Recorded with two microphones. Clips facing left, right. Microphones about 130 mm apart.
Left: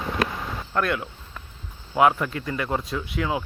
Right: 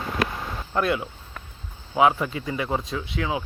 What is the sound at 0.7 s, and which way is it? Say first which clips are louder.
Speech: right 1 dB; 10° right (ahead or behind).